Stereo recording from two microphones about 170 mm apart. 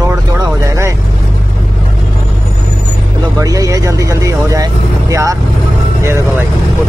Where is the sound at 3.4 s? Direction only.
20° right (ahead or behind).